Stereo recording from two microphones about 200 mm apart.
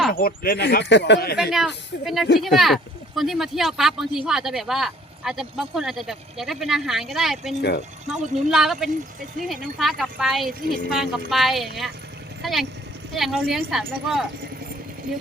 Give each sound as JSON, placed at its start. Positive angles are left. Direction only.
{"t": 0.1, "sound": "speech", "side_deg": 45}
{"t": 1.4, "sound": "speech", "side_deg": 0}
{"t": 7.6, "sound": "speech", "side_deg": 55}
{"t": 8.0, "sound": "speech", "side_deg": 0}